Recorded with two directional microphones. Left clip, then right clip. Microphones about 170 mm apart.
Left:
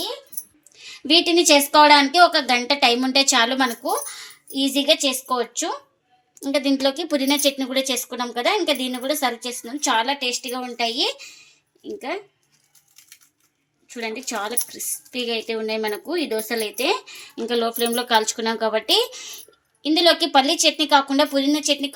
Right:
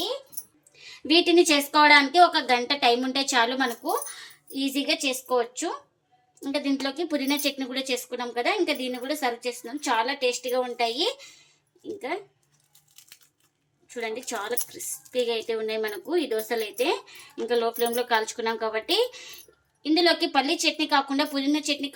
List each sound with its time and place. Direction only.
0.8 s speech: 50° left (ahead or behind)
13.8 s speech: 40° left (ahead or behind)